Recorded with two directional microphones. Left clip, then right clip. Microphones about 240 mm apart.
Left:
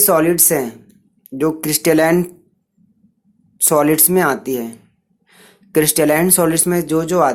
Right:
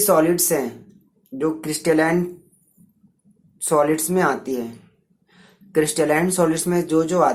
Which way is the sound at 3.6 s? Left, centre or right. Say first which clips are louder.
Left 4 dB; left.